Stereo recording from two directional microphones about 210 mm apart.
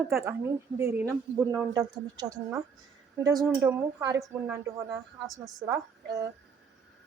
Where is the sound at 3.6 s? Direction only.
10° right (ahead or behind).